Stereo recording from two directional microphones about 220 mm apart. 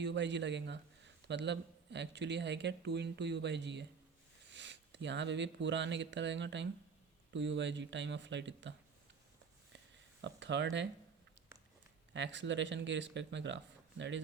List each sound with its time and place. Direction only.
0.0 s a man's voice: 55° right (ahead or behind)
9.7 s a sound: 55° right (ahead or behind)
12.1 s speech: 55° right (ahead or behind)